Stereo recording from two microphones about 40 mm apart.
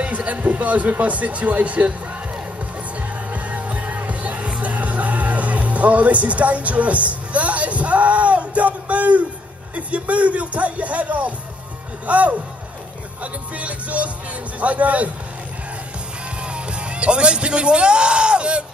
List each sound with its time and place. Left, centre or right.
0.0 s speech: right
3.0 s music: right
9.8 s speech: right
16.3 s speech: right